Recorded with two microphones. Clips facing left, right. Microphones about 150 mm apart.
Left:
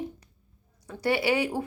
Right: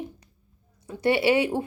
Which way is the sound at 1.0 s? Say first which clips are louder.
Right 4 dB; 25° right (ahead or behind).